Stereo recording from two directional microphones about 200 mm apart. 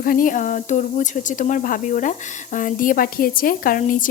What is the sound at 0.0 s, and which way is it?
A woman's voice, 45° left (ahead or behind).